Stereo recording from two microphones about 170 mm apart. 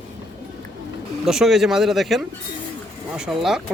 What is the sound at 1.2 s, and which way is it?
Speech, centre (ahead or behind).